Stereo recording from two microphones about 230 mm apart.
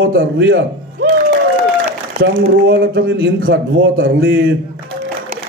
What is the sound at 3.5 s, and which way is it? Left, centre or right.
Speech, right.